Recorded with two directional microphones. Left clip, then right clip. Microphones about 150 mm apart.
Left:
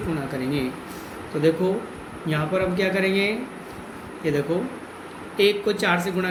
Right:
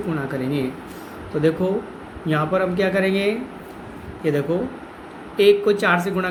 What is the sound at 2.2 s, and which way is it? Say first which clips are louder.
Speech: right 4 dB; 60° right (ahead or behind).